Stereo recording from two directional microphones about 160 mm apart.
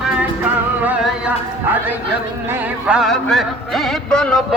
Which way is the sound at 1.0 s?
10° right (ahead or behind).